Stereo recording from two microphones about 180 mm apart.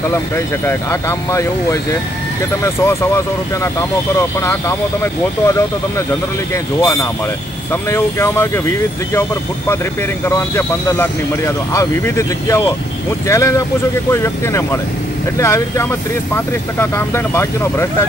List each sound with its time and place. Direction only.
0.7 s speech: 15° left (ahead or behind)
4.2 s speech: 15° left (ahead or behind)
10.2 s speech: 15° left (ahead or behind)